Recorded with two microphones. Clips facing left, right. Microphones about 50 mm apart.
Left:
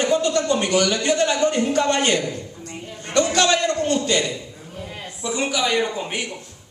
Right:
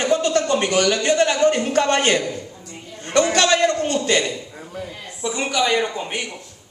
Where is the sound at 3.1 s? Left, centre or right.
Right.